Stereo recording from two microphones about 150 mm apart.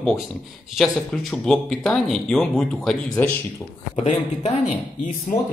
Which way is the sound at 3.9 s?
50° left (ahead or behind).